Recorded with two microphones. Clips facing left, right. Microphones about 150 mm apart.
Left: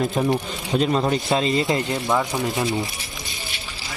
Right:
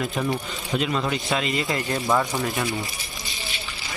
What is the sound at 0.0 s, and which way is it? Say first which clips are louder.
Speech: left 5 dB; 25° left (ahead or behind).